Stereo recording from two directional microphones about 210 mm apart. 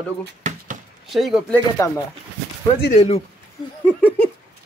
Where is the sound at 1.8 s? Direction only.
15° left (ahead or behind).